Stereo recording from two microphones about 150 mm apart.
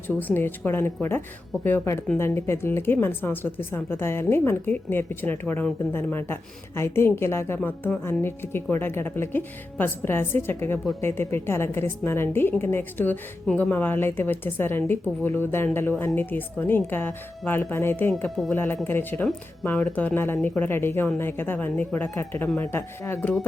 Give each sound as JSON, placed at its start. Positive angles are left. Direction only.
{"t": 0.2, "sound": "a woman's voice", "side_deg": 10}